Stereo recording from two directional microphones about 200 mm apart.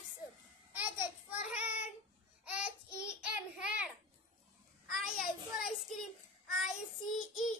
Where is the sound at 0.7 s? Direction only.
5° right (ahead or behind).